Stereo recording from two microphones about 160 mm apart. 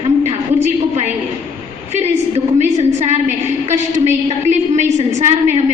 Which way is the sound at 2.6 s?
45° right (ahead or behind).